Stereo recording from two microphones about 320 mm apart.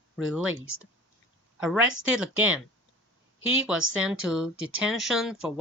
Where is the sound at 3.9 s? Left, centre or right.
Centre.